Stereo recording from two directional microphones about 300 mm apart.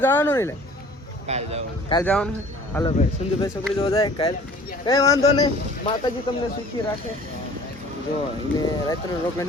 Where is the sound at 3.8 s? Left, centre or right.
Centre.